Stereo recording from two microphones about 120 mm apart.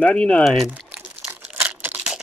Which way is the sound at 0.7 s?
10° right (ahead or behind).